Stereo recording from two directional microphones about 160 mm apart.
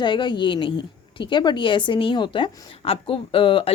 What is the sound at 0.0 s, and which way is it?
A woman's voice, 30° left (ahead or behind).